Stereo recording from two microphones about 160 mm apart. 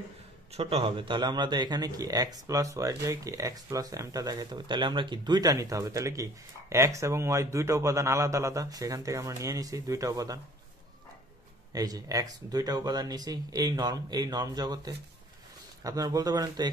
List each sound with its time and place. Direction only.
0.5 s speech: 40° right (ahead or behind); by 10.4 s 20° right (ahead or behind)
11.7 s speech: 25° right (ahead or behind)